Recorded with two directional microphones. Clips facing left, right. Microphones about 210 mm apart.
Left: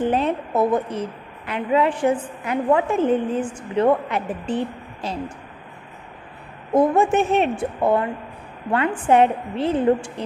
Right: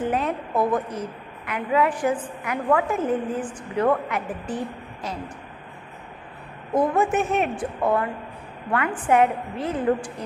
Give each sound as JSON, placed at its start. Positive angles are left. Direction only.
{"t": 0.0, "sound": "a woman's voice", "side_deg": 30}
{"t": 6.7, "sound": "a woman's voice", "side_deg": 30}